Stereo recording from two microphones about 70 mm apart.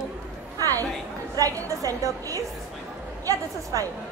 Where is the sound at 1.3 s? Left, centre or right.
Right.